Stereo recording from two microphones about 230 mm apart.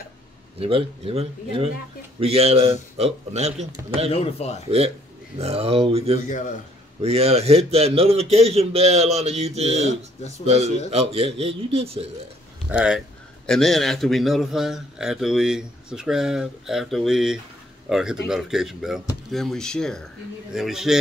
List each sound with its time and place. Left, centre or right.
0.6 s a man's voice: right
4.1 s speech: left
4.6 s a man's voice: right
10.9 s a man's voice: right
12.6 s a man's voice: centre